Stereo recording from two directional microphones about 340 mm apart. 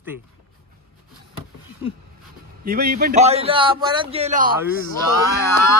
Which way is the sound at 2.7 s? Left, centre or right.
Right.